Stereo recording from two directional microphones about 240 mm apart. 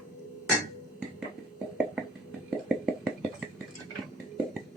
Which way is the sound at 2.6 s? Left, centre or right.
Centre.